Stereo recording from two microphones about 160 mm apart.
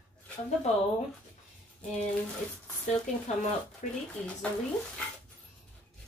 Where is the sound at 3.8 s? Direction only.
50° left (ahead or behind).